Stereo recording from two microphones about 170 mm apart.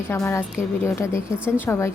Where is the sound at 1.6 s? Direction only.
15° left (ahead or behind).